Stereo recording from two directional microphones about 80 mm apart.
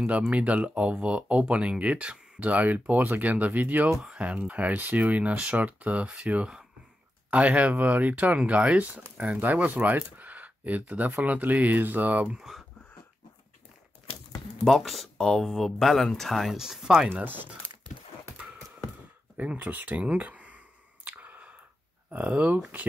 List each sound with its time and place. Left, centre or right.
0.3 s speech: centre
12.4 s speech: centre
14.6 s speech: centre
17.1 s speech: right
17.6 s a sound: right
19.3 s a sound: centre
22.1 s speech: centre